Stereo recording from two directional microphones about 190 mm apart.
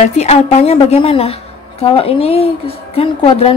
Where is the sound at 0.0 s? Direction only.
35° left (ahead or behind).